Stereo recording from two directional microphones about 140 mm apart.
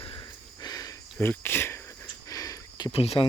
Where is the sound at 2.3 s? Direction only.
25° left (ahead or behind).